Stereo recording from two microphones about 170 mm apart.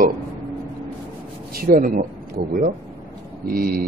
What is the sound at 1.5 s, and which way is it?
Speech, 55° right (ahead or behind).